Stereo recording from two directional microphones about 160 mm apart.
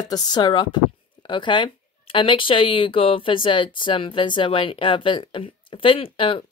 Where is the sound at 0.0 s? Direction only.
25° left (ahead or behind).